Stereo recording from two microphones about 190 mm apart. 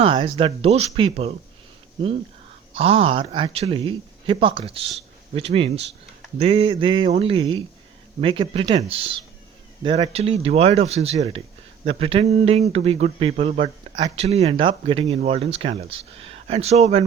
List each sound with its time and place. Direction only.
0.0 s speech: 25° right (ahead or behind)
2.7 s speech: 30° right (ahead or behind)